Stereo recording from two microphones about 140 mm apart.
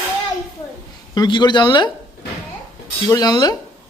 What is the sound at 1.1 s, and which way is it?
Speech, 30° left (ahead or behind).